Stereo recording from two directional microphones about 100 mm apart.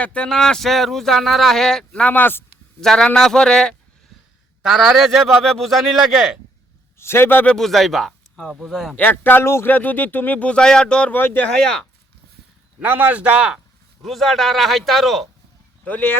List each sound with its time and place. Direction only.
0.0 s speech: 10° left (ahead or behind)
2.8 s speech: 5° left (ahead or behind)
4.6 s speech: 5° right (ahead or behind)
7.0 s a man's voice: 25° left (ahead or behind)
7.5 s speech: centre (ahead or behind)
9.0 s speech: 20° left (ahead or behind)
11.2 s a man's voice: 20° left (ahead or behind)
11.4 s speech: 5° left (ahead or behind)
12.8 s speech: 20° right (ahead or behind)
14.0 s speech: centre (ahead or behind)
15.8 s speech: 15° left (ahead or behind)